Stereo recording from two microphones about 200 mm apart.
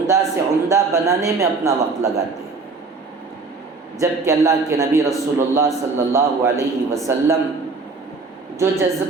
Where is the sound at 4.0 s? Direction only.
15° right (ahead or behind).